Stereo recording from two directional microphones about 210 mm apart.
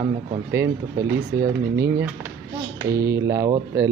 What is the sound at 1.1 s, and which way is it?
Speech, 50° right (ahead or behind).